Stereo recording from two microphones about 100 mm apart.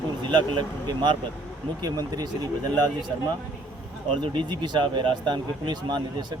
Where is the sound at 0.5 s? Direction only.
50° right (ahead or behind).